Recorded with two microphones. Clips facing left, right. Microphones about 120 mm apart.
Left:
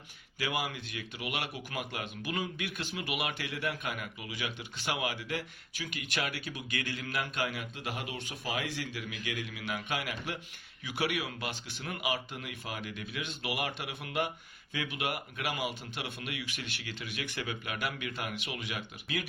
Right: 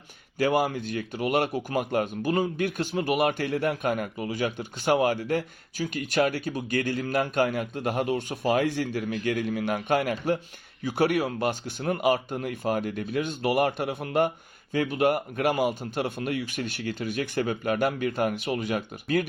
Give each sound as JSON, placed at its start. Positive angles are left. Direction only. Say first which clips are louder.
{"t": 0.3, "sound": "speech", "louder": "right 11 dB", "side_deg": -45}